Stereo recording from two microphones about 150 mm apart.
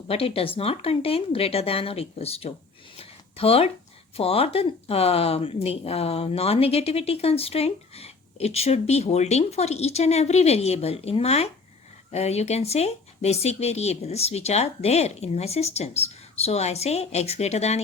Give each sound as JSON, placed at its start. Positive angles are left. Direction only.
{"t": 0.1, "sound": "speech", "side_deg": 40}
{"t": 3.0, "sound": "a sound", "side_deg": 40}
{"t": 4.2, "sound": "speech", "side_deg": 40}